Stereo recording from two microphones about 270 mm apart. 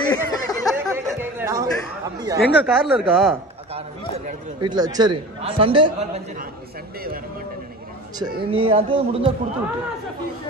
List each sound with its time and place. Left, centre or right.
0.0 s a sound: centre
0.9 s chatter: centre
2.1 s speech: centre
4.6 s speech: centre
8.2 s speech: centre